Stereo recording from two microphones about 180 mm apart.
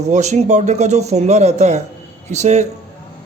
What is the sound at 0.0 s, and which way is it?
Speech, 40° right (ahead or behind).